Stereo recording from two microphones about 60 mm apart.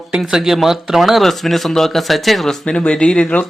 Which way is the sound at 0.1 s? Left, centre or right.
Centre.